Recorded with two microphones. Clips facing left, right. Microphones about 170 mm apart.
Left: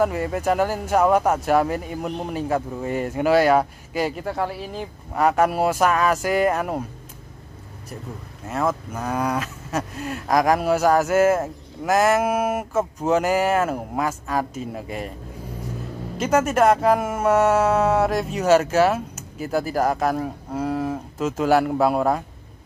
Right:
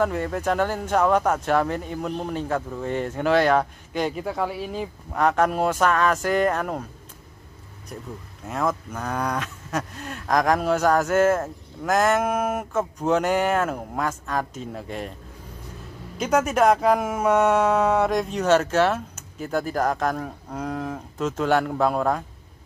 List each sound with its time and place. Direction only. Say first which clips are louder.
0.0 s speech: left 2 dB; 5° left (ahead or behind)
8.5 s speech: left 2 dB; 5° left (ahead or behind)
16.2 s speech: left 2 dB; centre (ahead or behind)